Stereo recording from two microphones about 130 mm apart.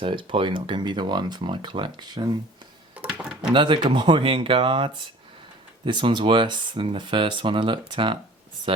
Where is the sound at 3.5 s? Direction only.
40° right (ahead or behind).